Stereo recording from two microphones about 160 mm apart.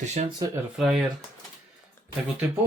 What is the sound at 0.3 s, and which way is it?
Speech, 20° right (ahead or behind).